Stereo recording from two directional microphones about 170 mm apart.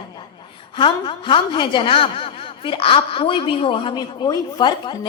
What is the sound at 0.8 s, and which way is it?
A woman's voice, 30° left (ahead or behind).